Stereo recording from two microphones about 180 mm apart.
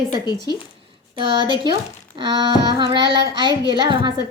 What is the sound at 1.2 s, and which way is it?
Speech, 25° right (ahead or behind).